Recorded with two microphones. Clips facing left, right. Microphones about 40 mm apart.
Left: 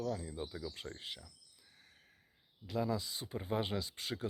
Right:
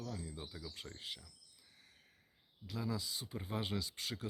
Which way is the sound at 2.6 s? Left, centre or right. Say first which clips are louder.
Left 5 dB; centre.